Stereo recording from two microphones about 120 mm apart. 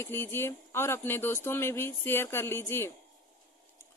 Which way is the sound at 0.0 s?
20° left (ahead or behind).